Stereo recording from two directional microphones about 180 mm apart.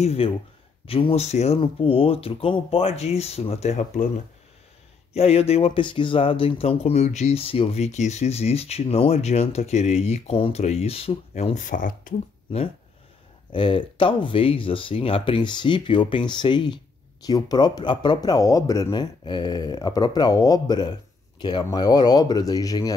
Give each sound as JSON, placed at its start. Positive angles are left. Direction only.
{"t": 0.0, "sound": "speech", "side_deg": 35}
{"t": 5.1, "sound": "speech", "side_deg": 35}
{"t": 13.5, "sound": "speech", "side_deg": 25}